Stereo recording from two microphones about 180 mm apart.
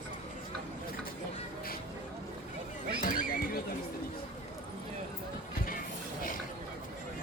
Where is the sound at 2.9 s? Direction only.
50° left (ahead or behind).